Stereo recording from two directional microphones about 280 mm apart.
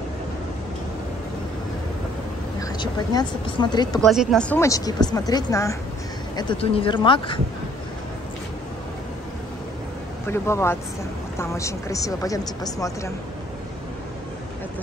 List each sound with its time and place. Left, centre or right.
2.6 s speech: centre
4.0 s speech: centre
10.2 s speech: centre